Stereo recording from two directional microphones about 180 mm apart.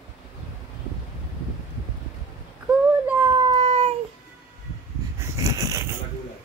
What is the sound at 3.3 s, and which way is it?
Child singing, 30° right (ahead or behind).